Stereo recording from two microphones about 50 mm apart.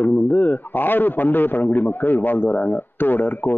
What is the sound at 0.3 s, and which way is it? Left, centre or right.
A man's voice, left.